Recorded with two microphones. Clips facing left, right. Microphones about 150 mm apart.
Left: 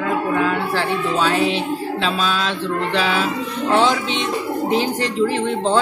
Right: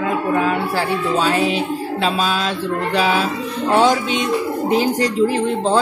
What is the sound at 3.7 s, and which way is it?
A woman's voice, 45° right (ahead or behind).